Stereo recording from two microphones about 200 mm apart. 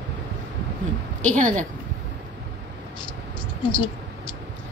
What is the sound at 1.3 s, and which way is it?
Speech, 40° right (ahead or behind).